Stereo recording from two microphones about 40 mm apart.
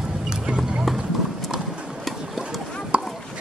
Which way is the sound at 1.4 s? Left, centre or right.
Centre.